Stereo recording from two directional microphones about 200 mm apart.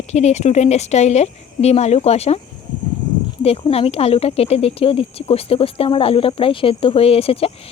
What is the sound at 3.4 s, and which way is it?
Speech, 30° left (ahead or behind).